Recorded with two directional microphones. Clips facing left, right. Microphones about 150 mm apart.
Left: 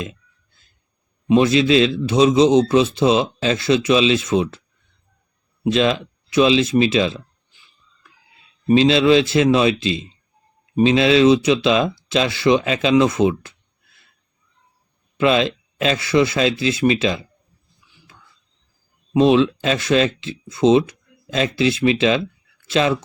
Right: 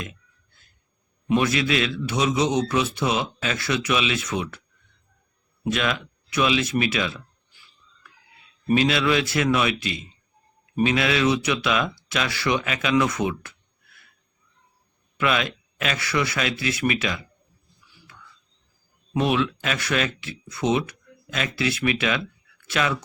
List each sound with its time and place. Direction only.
1.3 s a man's voice: 25° left (ahead or behind)
5.6 s a man's voice: 25° left (ahead or behind)
15.2 s a man's voice: 25° left (ahead or behind)
17.7 s a sound: 20° left (ahead or behind)
19.1 s a man's voice: 25° left (ahead or behind)